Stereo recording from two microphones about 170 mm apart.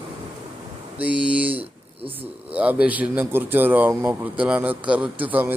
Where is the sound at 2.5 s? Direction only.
10° right (ahead or behind).